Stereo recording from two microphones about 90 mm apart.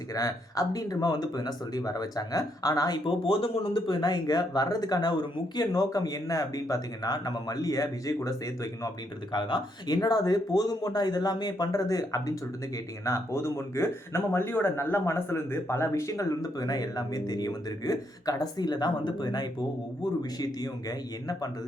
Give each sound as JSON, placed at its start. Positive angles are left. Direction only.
{"t": 0.1, "sound": "speech", "side_deg": 40}
{"t": 3.1, "sound": "speech", "side_deg": 85}
{"t": 9.3, "sound": "speech", "side_deg": 60}